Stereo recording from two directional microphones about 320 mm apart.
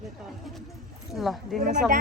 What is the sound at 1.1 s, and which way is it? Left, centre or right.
Speech, centre.